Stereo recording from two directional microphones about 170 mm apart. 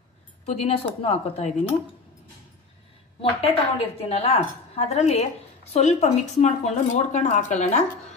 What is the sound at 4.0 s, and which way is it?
A woman's voice, 35° left (ahead or behind).